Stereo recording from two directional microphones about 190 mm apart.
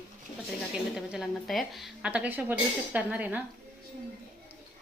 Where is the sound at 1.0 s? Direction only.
Centre (ahead or behind).